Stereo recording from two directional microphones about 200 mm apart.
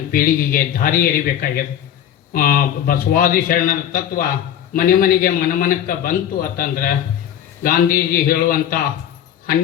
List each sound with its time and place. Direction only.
0.1 s a man's voice: 45° left (ahead or behind)